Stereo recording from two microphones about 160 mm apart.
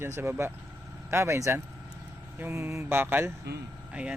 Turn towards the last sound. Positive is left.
turn(degrees=-5)  # may be behind; listen again after turning